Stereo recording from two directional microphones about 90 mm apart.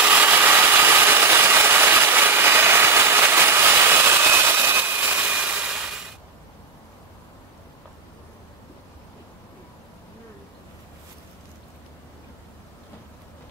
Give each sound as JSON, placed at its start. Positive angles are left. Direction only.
{"t": 0.0, "sound": "engine", "side_deg": -20}